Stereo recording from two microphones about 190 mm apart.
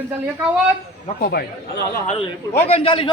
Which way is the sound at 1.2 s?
55° left (ahead or behind).